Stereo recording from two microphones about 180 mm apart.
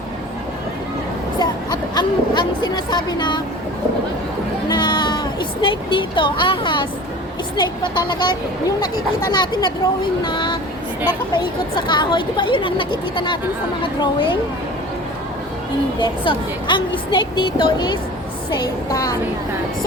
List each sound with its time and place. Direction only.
1.4 s speech: 25° left (ahead or behind)
4.7 s a sound: 25° left (ahead or behind)
5.6 s speech: 25° left (ahead or behind)
16.0 s speech: 25° left (ahead or behind)